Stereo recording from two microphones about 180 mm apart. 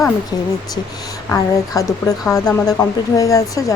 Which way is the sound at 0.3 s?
20° left (ahead or behind).